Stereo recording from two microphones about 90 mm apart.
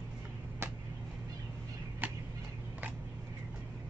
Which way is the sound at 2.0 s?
20° right (ahead or behind).